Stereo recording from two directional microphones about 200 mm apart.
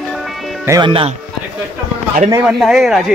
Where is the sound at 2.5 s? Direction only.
5° right (ahead or behind).